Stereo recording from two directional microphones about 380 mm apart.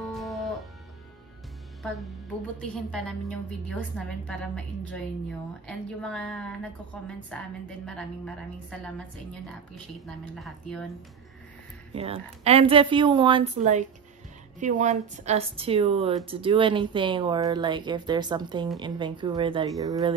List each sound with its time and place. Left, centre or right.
0.1 s music: centre
1.8 s a woman's voice: centre
10.0 s a woman's voice: centre
11.9 s a woman's voice: centre